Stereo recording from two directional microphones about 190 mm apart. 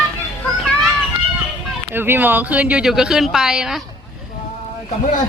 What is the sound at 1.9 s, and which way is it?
Speech, 10° right (ahead or behind).